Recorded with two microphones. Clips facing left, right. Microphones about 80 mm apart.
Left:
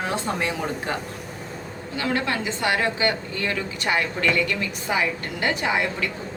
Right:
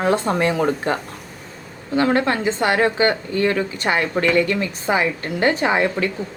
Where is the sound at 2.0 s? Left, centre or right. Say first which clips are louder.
Right 7 dB; right.